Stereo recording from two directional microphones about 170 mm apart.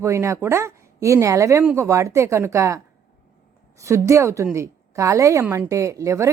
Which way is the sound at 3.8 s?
15° right (ahead or behind).